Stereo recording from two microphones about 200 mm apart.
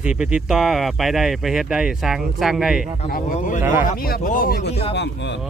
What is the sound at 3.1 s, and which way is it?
Speech, 40° left (ahead or behind).